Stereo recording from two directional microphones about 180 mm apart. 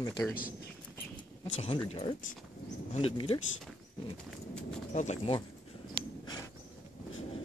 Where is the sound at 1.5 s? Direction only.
35° left (ahead or behind).